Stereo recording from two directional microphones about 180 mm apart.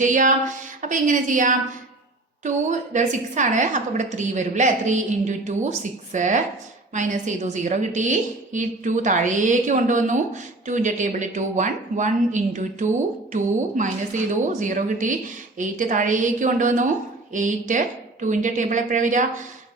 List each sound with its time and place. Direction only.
0.0 s a woman's voice: 45° right (ahead or behind)